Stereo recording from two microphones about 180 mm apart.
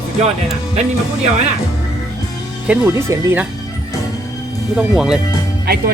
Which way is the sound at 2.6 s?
15° right (ahead or behind).